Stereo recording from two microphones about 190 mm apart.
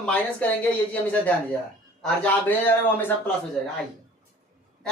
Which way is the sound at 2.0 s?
5° left (ahead or behind).